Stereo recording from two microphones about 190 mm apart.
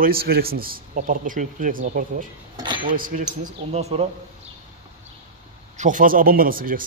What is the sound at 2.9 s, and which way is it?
Speech, 45° right (ahead or behind).